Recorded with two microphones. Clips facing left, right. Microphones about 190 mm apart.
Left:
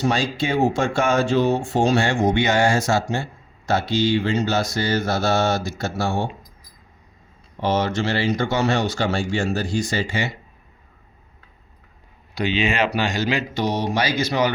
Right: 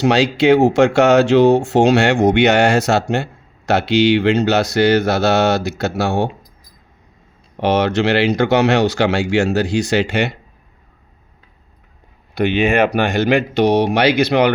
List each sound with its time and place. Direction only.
0.0 s speech: 75° right (ahead or behind)
7.5 s speech: 70° right (ahead or behind)
12.3 s speech: 55° right (ahead or behind)